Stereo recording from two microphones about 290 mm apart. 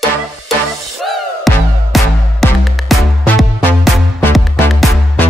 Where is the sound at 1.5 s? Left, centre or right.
Centre.